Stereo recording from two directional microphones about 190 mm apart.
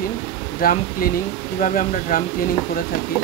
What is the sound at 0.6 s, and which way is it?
Speech, 50° left (ahead or behind).